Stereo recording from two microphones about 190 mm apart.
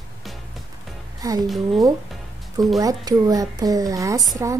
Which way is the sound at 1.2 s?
20° right (ahead or behind).